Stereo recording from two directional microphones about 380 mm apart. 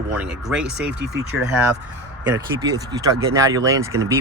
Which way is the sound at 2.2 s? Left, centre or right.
Centre.